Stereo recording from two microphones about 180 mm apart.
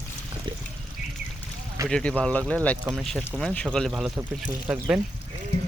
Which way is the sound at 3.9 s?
5° right (ahead or behind).